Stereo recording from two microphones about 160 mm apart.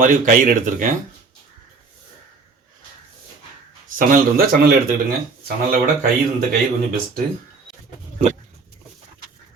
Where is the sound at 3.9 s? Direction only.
60° right (ahead or behind).